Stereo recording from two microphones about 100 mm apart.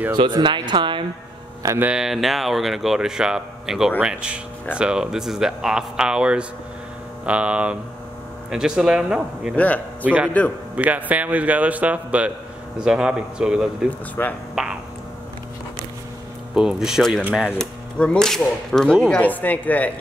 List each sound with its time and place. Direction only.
0.1 s speech: 50° right (ahead or behind)
2.0 s speech: 5° right (ahead or behind)
13.8 s a woman's voice: 15° left (ahead or behind)
14.5 s a sound: 5° right (ahead or behind)
16.5 s speech: 5° right (ahead or behind)
17.6 s a woman's voice: 10° left (ahead or behind)